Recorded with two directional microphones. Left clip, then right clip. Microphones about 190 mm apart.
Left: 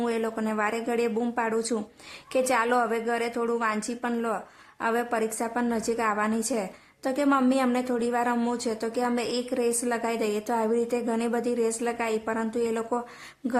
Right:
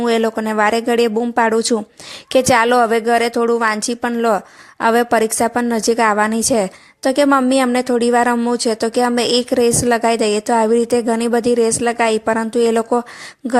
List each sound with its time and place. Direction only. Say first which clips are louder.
0.0 s speech: right 12 dB; 35° right (ahead or behind)